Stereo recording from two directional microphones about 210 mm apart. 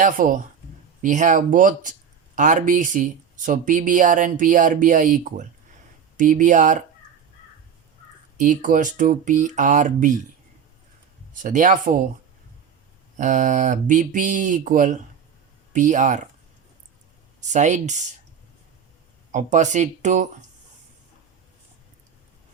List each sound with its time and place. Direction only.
0.0 s speech: 40° right (ahead or behind)
8.4 s speech: 40° right (ahead or behind)
11.4 s speech: 40° right (ahead or behind)
13.1 s speech: 35° right (ahead or behind)
17.4 s speech: 35° right (ahead or behind)
19.3 s speech: 35° right (ahead or behind)